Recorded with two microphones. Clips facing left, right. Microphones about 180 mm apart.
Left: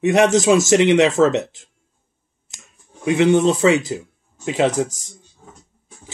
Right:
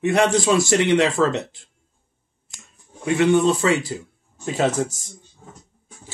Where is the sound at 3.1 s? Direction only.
20° left (ahead or behind).